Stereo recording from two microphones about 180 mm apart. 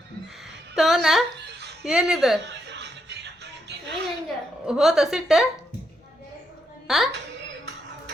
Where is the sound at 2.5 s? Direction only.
70° right (ahead or behind).